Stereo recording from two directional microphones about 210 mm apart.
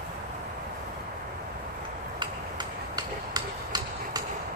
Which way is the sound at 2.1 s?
20° right (ahead or behind).